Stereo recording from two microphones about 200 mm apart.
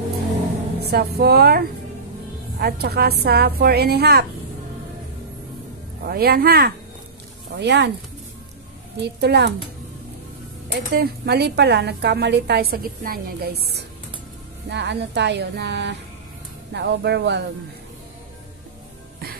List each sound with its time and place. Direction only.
0.7 s speech: 50° right (ahead or behind)
2.6 s speech: 50° right (ahead or behind)
6.0 s speech: 50° right (ahead or behind)
9.0 s speech: 55° right (ahead or behind)
10.7 s speech: 50° right (ahead or behind)